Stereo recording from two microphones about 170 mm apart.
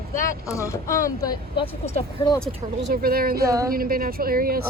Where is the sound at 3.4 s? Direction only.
20° right (ahead or behind).